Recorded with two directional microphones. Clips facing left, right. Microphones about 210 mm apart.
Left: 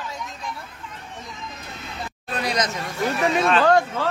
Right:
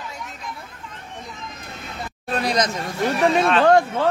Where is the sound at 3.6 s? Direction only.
25° right (ahead or behind).